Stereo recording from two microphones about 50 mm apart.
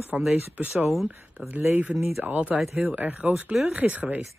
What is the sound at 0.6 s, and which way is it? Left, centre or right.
Speech, right.